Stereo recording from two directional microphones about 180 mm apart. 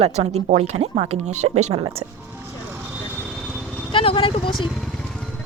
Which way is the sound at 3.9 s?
30° left (ahead or behind).